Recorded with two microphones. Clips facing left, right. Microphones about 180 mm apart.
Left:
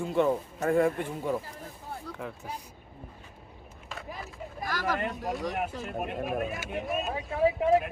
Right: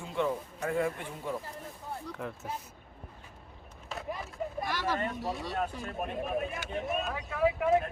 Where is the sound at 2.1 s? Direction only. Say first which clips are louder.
Even; centre (ahead or behind).